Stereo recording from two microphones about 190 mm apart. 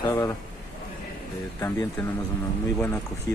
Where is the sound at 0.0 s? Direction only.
20° left (ahead or behind).